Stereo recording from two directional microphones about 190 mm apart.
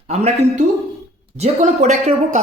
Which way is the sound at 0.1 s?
35° right (ahead or behind).